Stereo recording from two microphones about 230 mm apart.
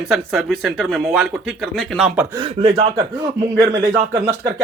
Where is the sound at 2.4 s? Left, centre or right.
Right.